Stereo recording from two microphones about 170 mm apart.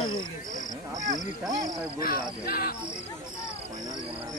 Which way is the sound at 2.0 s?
60° left (ahead or behind).